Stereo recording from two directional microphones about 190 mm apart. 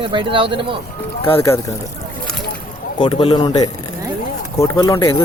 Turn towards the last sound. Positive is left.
turn(degrees=15)  # may be behind; listen again after turning